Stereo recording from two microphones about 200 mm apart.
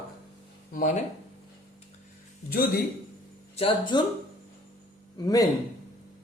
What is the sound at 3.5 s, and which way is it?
Speech, 25° left (ahead or behind).